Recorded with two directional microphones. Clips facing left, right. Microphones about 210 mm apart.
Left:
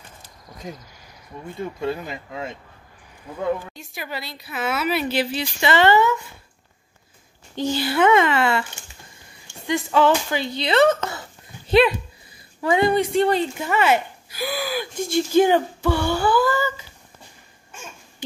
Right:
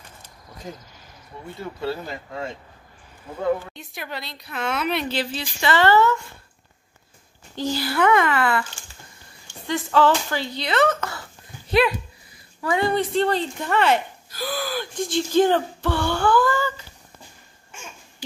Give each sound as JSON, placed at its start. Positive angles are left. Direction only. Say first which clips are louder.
{"t": 1.6, "sound": "speech", "louder": "left 2 dB", "side_deg": 20}
{"t": 3.7, "sound": "speech", "louder": "left 1 dB", "side_deg": 0}
{"t": 7.5, "sound": "speech", "louder": "left 2 dB", "side_deg": 20}
{"t": 12.6, "sound": "speech", "louder": "left 3 dB", "side_deg": 20}